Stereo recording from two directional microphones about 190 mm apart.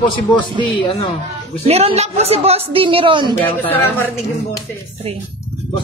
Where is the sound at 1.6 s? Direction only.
35° right (ahead or behind).